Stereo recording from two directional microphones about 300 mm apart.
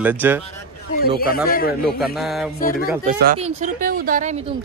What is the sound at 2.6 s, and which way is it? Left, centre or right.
Speech, left.